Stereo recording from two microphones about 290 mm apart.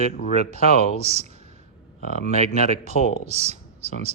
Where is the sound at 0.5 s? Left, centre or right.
Right.